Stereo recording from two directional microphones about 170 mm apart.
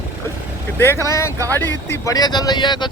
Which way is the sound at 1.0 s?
15° left (ahead or behind).